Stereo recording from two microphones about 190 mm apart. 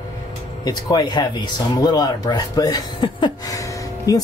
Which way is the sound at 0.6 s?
20° left (ahead or behind).